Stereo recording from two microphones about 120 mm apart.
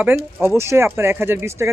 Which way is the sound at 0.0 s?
15° right (ahead or behind).